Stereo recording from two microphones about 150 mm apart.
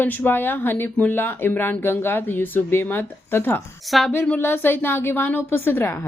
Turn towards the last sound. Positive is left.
turn(degrees=15)  # may be behind; listen again after turning